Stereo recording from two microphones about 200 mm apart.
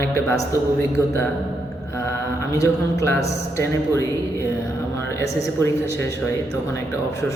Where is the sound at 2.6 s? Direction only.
15° left (ahead or behind).